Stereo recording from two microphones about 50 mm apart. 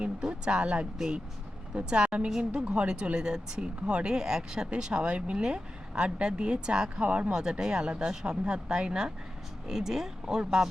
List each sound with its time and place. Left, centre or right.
0.0 s speech: centre